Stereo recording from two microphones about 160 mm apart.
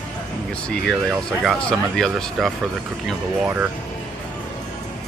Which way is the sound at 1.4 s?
Centre (ahead or behind).